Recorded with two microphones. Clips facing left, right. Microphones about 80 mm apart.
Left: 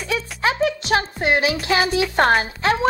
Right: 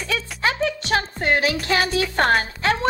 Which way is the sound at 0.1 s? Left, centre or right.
Centre.